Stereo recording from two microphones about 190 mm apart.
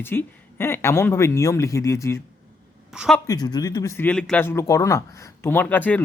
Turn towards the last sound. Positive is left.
turn(degrees=10)  # may be behind; listen again after turning